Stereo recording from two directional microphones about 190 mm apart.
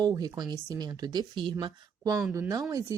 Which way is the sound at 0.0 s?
20° right (ahead or behind).